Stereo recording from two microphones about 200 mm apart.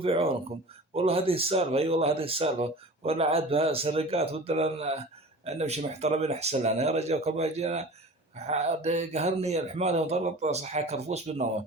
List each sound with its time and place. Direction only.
0.0 s speech: 30° right (ahead or behind)